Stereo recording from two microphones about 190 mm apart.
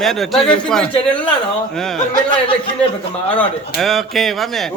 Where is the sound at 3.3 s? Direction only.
5° left (ahead or behind).